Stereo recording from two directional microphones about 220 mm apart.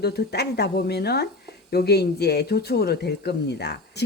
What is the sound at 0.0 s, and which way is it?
Speech, 45° left (ahead or behind).